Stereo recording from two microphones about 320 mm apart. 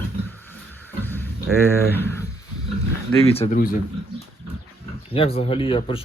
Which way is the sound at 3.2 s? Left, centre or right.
Centre.